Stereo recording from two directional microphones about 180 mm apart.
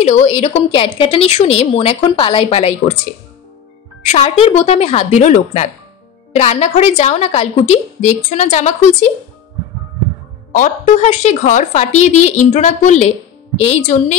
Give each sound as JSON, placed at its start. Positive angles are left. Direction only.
{"t": 0.0, "sound": "a woman's voice", "side_deg": 40}
{"t": 4.0, "sound": "a woman's voice", "side_deg": 35}
{"t": 10.5, "sound": "a woman's voice", "side_deg": 45}